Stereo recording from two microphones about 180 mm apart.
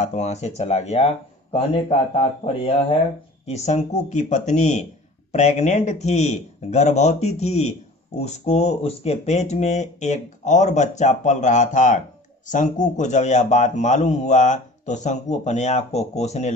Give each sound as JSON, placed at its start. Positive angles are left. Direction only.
{"t": 0.0, "sound": "a man's voice", "side_deg": 40}